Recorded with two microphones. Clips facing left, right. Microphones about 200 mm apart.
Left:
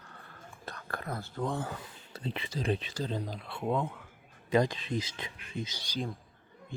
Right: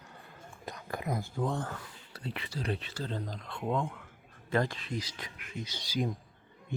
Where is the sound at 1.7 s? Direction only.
20° left (ahead or behind).